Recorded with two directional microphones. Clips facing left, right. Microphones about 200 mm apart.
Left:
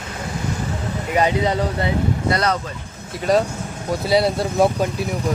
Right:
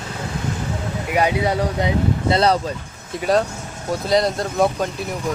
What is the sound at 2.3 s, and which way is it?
Speech, 30° right (ahead or behind).